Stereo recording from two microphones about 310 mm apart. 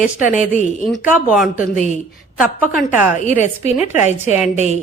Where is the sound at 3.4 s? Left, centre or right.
Left.